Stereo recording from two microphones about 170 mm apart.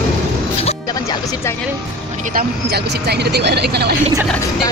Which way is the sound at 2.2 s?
60° right (ahead or behind).